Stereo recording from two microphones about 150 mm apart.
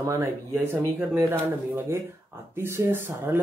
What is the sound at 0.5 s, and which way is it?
Speech, 15° right (ahead or behind).